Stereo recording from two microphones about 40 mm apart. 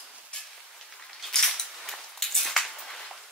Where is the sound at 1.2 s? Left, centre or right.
Centre.